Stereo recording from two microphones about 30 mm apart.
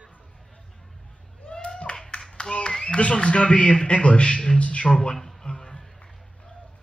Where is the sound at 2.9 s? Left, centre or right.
Left.